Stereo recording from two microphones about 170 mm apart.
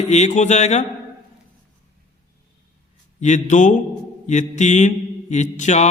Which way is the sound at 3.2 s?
45° left (ahead or behind).